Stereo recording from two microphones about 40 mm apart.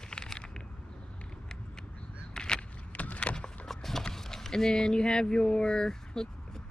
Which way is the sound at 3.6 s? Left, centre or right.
Centre.